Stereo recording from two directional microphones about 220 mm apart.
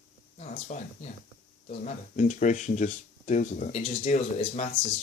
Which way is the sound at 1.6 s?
35° left (ahead or behind).